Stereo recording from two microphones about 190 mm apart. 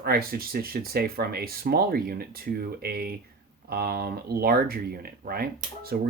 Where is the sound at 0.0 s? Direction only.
50° right (ahead or behind).